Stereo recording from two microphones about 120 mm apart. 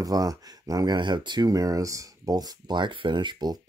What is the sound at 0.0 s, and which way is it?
Speech, 30° right (ahead or behind).